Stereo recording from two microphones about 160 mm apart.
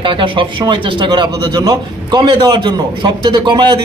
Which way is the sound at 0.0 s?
30° right (ahead or behind).